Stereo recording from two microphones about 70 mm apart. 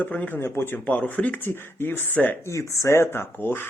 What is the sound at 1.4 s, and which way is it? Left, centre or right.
Speech, left.